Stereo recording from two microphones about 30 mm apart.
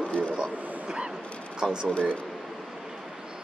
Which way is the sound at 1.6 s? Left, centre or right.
Right.